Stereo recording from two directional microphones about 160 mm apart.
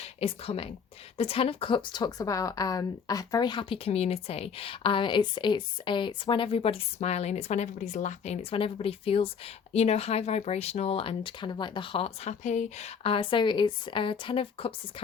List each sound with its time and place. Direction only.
0.2 s a woman's voice: 35° left (ahead or behind)
13.0 s a woman's voice: 35° left (ahead or behind)